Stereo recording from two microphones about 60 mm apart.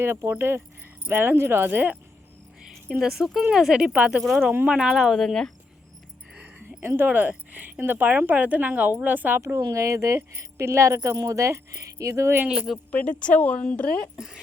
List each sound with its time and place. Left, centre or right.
0.0 s speech: right
3.0 s speech: centre
5.1 s speech: centre
6.3 s a sound: right
6.8 s speech: right
9.6 s speech: right
12.5 s speech: centre
12.9 s speech: left
14.2 s speech: centre